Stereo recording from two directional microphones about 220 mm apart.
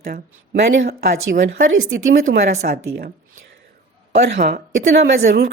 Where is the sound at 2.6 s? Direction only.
45° right (ahead or behind).